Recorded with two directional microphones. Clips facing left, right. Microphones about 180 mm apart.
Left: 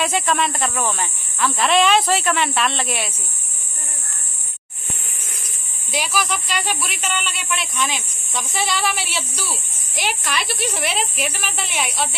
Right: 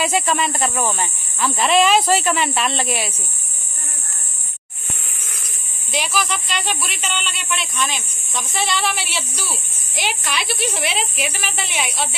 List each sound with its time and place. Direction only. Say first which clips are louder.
0.0 s speech: right 1 dB; centre (ahead or behind)
5.9 s speech: even; 5° left (ahead or behind)